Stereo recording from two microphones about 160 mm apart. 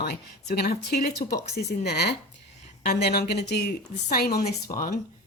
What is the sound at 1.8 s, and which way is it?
A woman's voice, 90° left.